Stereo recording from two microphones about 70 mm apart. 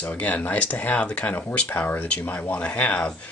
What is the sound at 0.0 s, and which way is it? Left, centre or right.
Speech, left.